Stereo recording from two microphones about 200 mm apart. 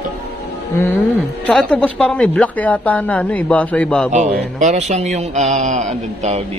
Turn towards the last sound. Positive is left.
turn(degrees=-35)  # may be behind; listen again after turning